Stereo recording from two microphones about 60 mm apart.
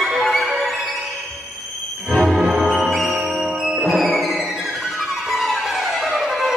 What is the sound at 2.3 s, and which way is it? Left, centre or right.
Music, centre.